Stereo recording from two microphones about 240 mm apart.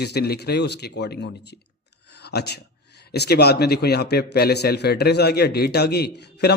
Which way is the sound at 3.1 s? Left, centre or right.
Left.